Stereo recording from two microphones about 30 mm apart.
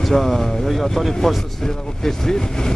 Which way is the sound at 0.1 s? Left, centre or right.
Centre.